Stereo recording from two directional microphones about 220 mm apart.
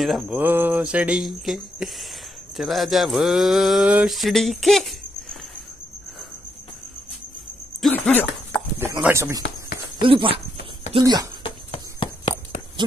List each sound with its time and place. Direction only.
0.0 s speech: centre (ahead or behind)
7.8 s dog: 5° left (ahead or behind)
8.7 s speech: 10° right (ahead or behind)
9.4 s a sound: 45° left (ahead or behind)
10.0 s speech: 25° right (ahead or behind)
11.4 s a sound: 25° left (ahead or behind)